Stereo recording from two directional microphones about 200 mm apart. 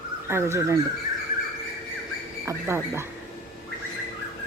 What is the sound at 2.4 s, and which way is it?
Speech, 15° right (ahead or behind).